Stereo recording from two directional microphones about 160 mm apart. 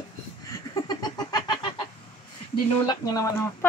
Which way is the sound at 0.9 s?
25° left (ahead or behind).